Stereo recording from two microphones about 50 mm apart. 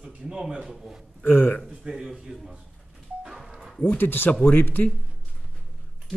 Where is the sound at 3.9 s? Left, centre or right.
Left.